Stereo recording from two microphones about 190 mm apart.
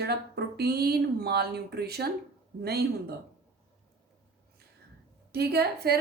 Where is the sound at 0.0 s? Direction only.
55° right (ahead or behind).